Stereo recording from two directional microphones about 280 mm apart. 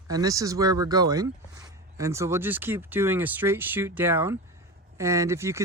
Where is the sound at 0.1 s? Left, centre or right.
Centre.